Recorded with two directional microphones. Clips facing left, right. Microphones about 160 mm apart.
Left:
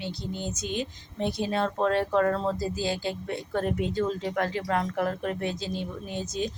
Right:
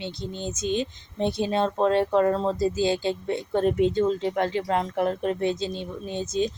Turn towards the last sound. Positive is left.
turn(degrees=-25)  # may be behind; listen again after turning